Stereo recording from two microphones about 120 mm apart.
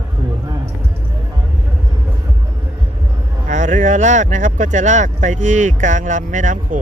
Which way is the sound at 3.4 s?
80° right.